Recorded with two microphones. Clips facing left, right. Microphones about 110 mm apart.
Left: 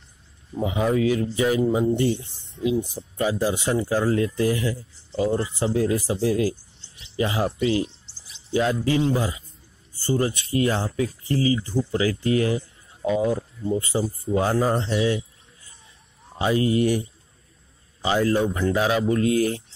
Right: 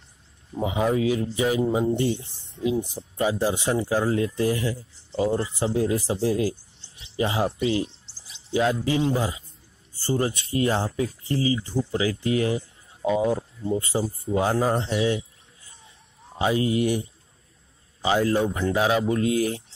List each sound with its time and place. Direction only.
0.8 s speech: 20° right (ahead or behind)
14.3 s a man's voice: 15° right (ahead or behind)
16.3 s speech: 20° right (ahead or behind)
18.0 s a man's voice: 20° right (ahead or behind)